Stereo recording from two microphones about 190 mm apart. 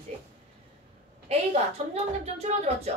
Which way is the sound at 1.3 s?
35° right (ahead or behind).